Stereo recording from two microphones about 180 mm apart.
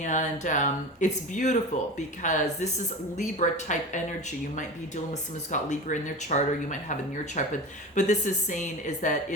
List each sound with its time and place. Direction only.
0.0 s a woman's voice: 45° left (ahead or behind)
5.5 s a woman's voice: 40° left (ahead or behind)